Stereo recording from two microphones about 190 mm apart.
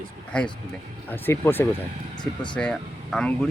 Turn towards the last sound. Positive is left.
turn(degrees=5)  # may be behind; listen again after turning